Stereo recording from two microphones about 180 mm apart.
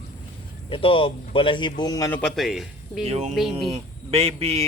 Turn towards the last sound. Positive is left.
turn(degrees=-35)  # may be behind; listen again after turning